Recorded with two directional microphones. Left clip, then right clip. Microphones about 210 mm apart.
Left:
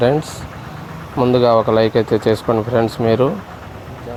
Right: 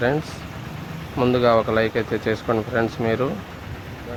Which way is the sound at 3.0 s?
5° left (ahead or behind).